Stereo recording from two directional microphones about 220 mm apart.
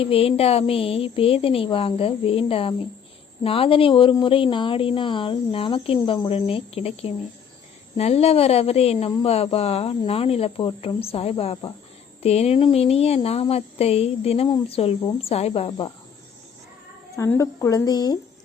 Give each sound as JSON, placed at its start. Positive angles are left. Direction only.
{"t": 0.0, "sound": "speech", "side_deg": 25}
{"t": 17.2, "sound": "speech", "side_deg": 10}